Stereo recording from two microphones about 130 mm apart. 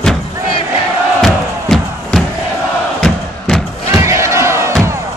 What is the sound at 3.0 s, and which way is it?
Crowd, 5° left (ahead or behind).